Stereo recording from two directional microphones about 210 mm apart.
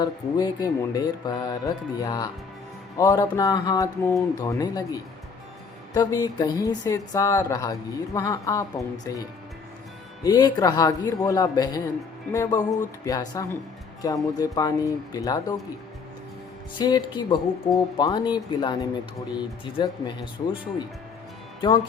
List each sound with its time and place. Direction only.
0.0 s speech: 20° left (ahead or behind)
10.2 s speech: 20° left (ahead or behind)
16.7 s speech: 20° left (ahead or behind)